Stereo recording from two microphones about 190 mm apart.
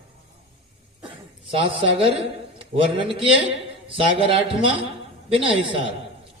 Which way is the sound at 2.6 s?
30° right (ahead or behind).